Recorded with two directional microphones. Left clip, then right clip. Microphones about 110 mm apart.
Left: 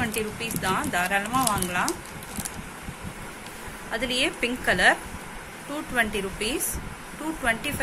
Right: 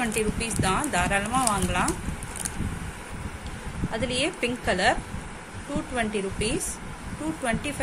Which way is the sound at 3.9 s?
25° right (ahead or behind).